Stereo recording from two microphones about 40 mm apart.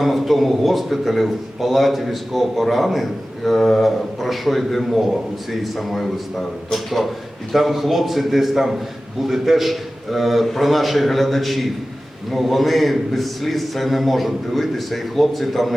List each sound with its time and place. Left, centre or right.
0.0 s a man's voice: centre